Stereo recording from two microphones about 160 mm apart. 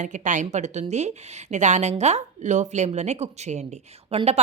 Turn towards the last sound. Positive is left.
turn(degrees=-40)  # may be behind; listen again after turning